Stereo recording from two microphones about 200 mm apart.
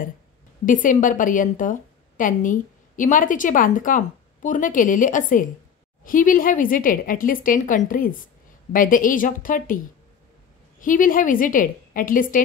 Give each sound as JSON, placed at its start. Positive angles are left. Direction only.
{"t": 0.7, "sound": "a woman's voice", "side_deg": 40}
{"t": 10.8, "sound": "a woman's voice", "side_deg": 40}